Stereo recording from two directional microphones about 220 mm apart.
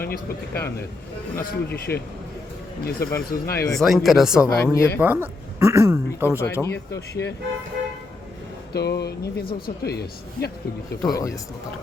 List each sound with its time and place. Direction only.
0.0 s speech: 45° left (ahead or behind)
3.7 s speech: centre (ahead or behind)
4.4 s speech: 15° left (ahead or behind)
4.9 s speech: 5° right (ahead or behind)
6.4 s speech: 10° left (ahead or behind)
7.1 s speech: 50° left (ahead or behind)
8.7 s speech: 45° left (ahead or behind)
11.0 s speech: 15° left (ahead or behind)